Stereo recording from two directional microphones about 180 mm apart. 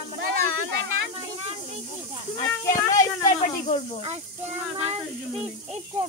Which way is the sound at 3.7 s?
35° left (ahead or behind).